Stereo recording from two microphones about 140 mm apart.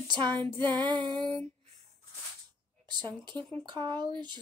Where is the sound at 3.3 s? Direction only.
30° right (ahead or behind).